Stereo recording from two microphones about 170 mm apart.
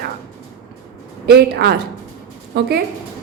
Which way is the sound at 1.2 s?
70° right (ahead or behind).